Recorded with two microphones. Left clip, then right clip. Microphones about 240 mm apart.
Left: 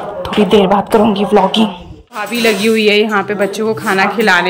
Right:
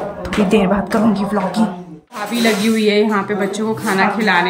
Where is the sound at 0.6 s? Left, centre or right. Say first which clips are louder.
Left 6 dB; right.